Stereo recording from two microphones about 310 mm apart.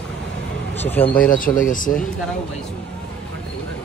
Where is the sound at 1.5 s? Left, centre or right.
Left.